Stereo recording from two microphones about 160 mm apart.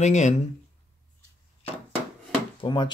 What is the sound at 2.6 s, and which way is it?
Speech, 30° left (ahead or behind).